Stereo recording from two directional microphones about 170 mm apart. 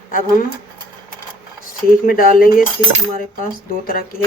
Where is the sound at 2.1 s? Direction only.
60° left (ahead or behind).